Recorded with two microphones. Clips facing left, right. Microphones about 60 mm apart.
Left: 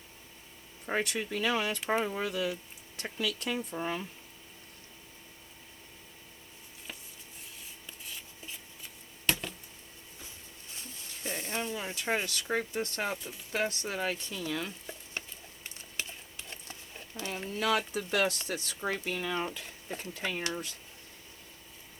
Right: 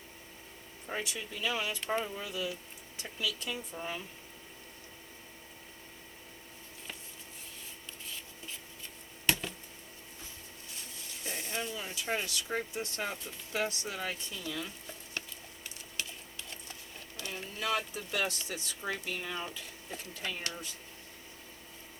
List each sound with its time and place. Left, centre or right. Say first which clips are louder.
0.9 s speech: left 6 dB; left
9.2 s a sound: even; centre
11.2 s a sound: left 3 dB; left
11.9 s speech: left 3 dB; left
12.2 s speech: left 3 dB; left
16.0 s a sound: left 1 dB; left
17.6 s speech: left 4 dB; left
19.1 s speech: left 5 dB; left
19.4 s speech: left 5 dB; left